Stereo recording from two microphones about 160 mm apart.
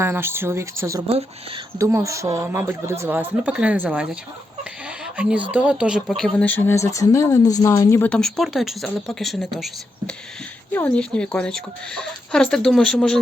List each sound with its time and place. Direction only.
0.0 s speech: 15° right (ahead or behind); by 8.1 s 15° left (ahead or behind)
8.1 s speech: centre (ahead or behind)
10.7 s speech: 10° left (ahead or behind)